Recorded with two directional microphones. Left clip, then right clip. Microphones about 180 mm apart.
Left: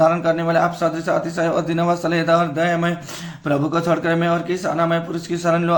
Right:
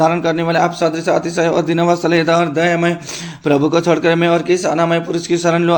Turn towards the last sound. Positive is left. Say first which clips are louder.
# right 5 dB
turn(degrees=-20)  # may be behind; listen again after turning